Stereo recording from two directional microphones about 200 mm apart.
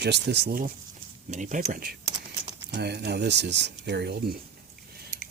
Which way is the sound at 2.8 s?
55° right (ahead or behind).